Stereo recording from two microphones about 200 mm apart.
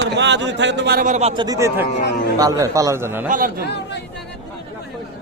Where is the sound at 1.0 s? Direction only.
35° right (ahead or behind).